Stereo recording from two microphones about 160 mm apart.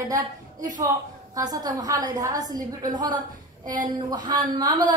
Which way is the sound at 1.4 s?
25° right (ahead or behind).